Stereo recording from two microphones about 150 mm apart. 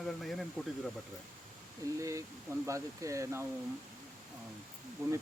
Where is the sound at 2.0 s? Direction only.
20° right (ahead or behind).